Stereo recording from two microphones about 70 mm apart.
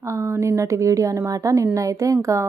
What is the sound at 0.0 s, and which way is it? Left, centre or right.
A woman's voice, right.